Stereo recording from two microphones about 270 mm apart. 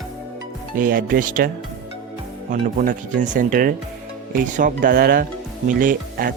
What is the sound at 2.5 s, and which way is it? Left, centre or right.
Speech, right.